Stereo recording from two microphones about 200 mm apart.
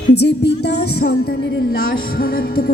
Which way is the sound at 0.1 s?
55° left (ahead or behind).